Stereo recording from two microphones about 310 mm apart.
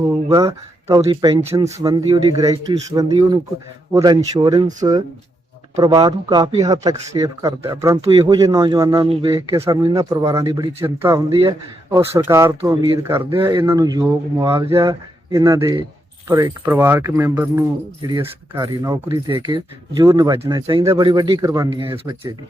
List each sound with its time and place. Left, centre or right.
0.0 s speech: centre